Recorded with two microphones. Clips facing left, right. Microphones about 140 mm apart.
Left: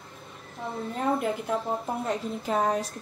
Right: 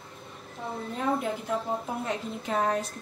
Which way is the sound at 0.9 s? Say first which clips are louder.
Left 2 dB; centre (ahead or behind).